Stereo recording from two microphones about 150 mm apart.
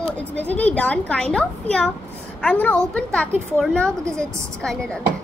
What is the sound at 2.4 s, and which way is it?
A woman's voice, 10° left (ahead or behind).